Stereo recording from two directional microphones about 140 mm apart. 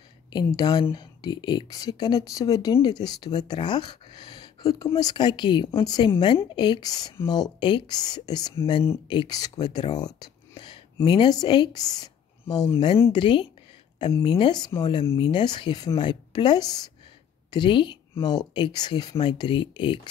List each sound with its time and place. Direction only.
0.3 s a woman's voice: 30° left (ahead or behind)
4.6 s speech: 25° left (ahead or behind)
5.7 s a woman's voice: 20° left (ahead or behind)
5.9 s a woman's voice: 35° left (ahead or behind)
13.1 s speech: 40° left (ahead or behind)